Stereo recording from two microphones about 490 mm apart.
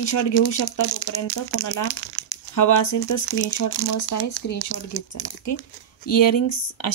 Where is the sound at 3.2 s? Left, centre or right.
Left.